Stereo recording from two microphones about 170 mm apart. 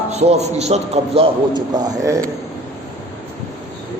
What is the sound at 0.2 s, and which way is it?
A man's voice, 40° right (ahead or behind).